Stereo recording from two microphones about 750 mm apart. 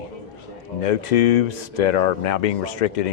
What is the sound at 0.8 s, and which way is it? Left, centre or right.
A man's voice, left.